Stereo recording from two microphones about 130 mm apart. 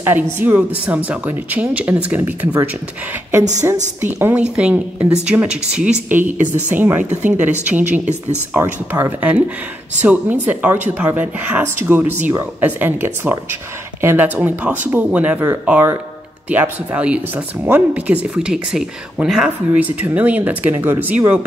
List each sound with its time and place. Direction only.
0.0 s speech: 15° right (ahead or behind)
4.2 s speech: 10° right (ahead or behind)